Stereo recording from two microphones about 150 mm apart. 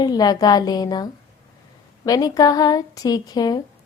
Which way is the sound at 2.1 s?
25° left (ahead or behind).